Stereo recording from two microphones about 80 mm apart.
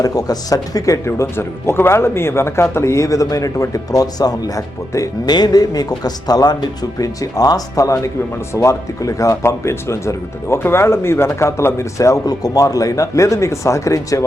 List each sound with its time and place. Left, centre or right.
0.0 s speech: left
5.3 s a man's voice: left